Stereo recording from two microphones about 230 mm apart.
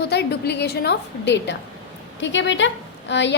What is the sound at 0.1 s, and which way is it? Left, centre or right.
A woman's voice, left.